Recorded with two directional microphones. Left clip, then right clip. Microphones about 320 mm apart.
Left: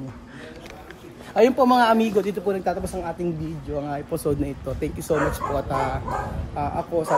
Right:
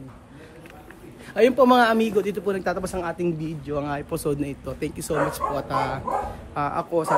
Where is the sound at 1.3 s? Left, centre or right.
Centre.